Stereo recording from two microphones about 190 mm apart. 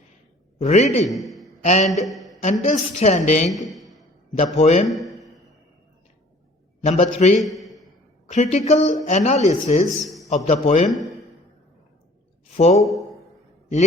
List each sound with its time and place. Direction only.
0.6 s speech: 35° left (ahead or behind)
1.0 s a man's voice: centre (ahead or behind)
1.6 s speech: 40° left (ahead or behind)
2.0 s a sound: centre (ahead or behind)
2.4 s speech: 40° left (ahead or behind)
3.8 s a sound: centre (ahead or behind)
4.5 s speech: 35° left (ahead or behind)
4.9 s a sound: centre (ahead or behind)
6.8 s speech: 35° left (ahead or behind)
7.3 s a sound: centre (ahead or behind)
8.3 s speech: 35° left (ahead or behind)
10.8 s speech: centre (ahead or behind)
12.5 s speech: 35° left (ahead or behind)